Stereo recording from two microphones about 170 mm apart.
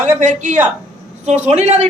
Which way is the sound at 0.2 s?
45° right (ahead or behind).